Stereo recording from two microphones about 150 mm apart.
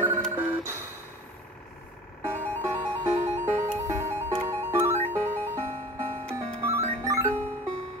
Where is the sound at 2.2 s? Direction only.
15° right (ahead or behind).